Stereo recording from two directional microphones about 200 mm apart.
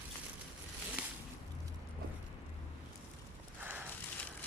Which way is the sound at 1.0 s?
5° right (ahead or behind).